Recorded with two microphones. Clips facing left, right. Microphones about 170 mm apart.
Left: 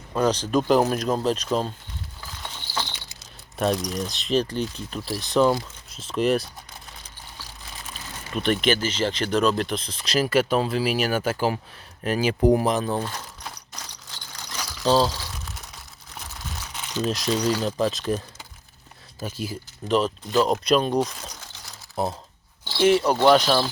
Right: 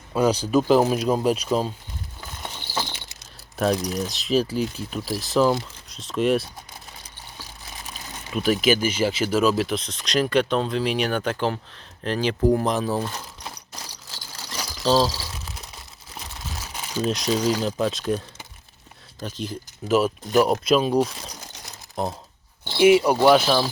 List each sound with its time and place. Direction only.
0.1 s speech: 10° right (ahead or behind)
2.7 s mechanisms: 45° right (ahead or behind)
3.6 s speech: centre (ahead or behind)
8.3 s speech: 5° right (ahead or behind)
12.4 s speech: 20° left (ahead or behind)
12.6 s speech: centre (ahead or behind)
13.8 s vehicle: 10° right (ahead or behind)
15.0 s crumpling: 5° right (ahead or behind)
16.7 s a sound: 10° right (ahead or behind)
17.1 s speech: centre (ahead or behind)
19.2 s speech: 5° left (ahead or behind)
19.9 s speech: 10° right (ahead or behind)
22.0 s speech: 5° left (ahead or behind)
22.8 s speech: 10° right (ahead or behind)